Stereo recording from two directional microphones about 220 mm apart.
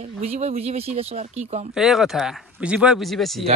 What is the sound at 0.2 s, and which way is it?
Speech, 30° right (ahead or behind).